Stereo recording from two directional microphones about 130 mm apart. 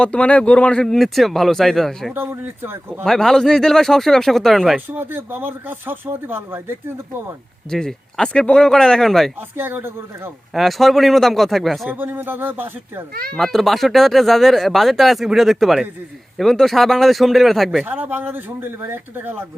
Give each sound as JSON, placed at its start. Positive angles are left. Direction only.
{"t": 0.0, "sound": "speech", "side_deg": 10}
{"t": 2.1, "sound": "speech", "side_deg": -15}
{"t": 3.0, "sound": "speech", "side_deg": 5}
{"t": 4.9, "sound": "speech", "side_deg": -15}
{"t": 7.7, "sound": "speech", "side_deg": 5}
{"t": 9.6, "sound": "speech", "side_deg": -15}
{"t": 10.5, "sound": "speech", "side_deg": 0}
{"t": 11.9, "sound": "speech", "side_deg": -15}
{"t": 13.3, "sound": "speech", "side_deg": 0}
{"t": 17.8, "sound": "speech", "side_deg": -15}